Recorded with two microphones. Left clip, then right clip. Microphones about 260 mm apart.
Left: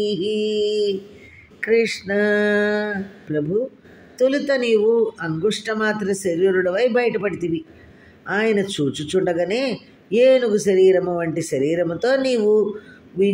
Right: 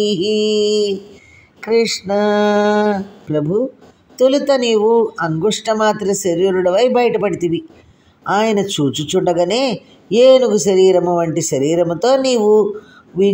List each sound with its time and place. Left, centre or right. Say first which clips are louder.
0.0 s mantra: right 6 dB; centre
1.6 s a man's voice: right 3 dB; centre